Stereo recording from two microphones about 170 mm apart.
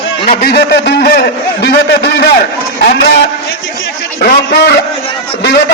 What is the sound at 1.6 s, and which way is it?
A man's voice, 85° left.